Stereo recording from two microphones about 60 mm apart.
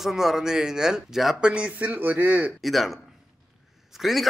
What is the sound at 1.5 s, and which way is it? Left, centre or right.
Speech, centre.